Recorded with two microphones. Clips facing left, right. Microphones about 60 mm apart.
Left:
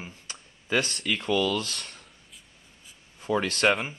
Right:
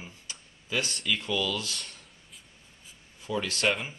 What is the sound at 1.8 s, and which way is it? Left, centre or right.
Speech, left.